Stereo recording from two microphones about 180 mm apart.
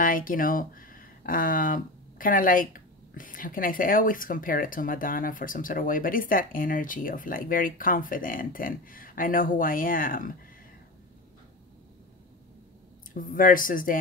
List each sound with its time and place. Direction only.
0.0 s speech: 50° left (ahead or behind)
13.1 s speech: 50° left (ahead or behind)